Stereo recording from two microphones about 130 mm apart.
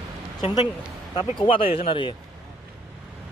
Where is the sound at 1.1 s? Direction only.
40° left (ahead or behind).